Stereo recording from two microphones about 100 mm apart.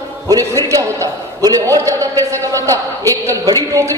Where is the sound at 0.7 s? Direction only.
35° right (ahead or behind).